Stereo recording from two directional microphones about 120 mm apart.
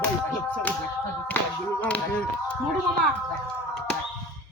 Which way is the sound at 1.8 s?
10° left (ahead or behind).